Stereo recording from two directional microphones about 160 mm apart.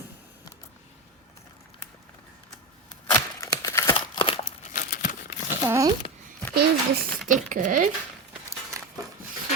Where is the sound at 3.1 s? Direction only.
20° left (ahead or behind).